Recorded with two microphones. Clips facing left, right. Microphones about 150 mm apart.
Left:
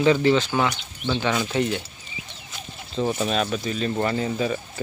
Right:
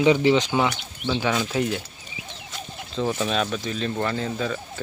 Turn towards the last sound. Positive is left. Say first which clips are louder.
# left 2 dB
turn(degrees=5)  # may be behind; listen again after turning